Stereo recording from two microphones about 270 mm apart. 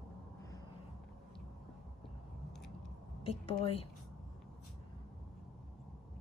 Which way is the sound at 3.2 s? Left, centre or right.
Left.